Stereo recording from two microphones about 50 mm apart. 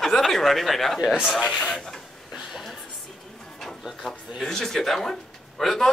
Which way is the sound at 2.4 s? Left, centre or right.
Centre.